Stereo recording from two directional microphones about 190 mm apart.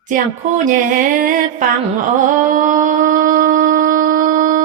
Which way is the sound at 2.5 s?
45° right (ahead or behind).